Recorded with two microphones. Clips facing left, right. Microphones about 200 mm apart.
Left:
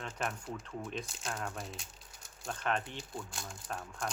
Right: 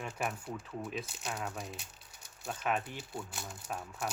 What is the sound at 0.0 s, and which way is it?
Speech, 10° right (ahead or behind).